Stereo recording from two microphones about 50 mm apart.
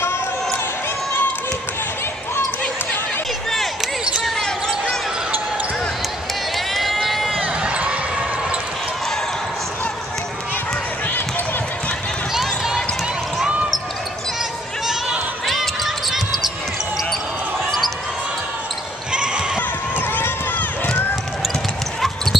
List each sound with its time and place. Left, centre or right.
6.7 s run: centre
7.6 s basketball bounce: right
15.4 s basketball bounce: centre
17.6 s basketball bounce: centre
19.1 s a sound: centre
22.0 s basketball bounce: centre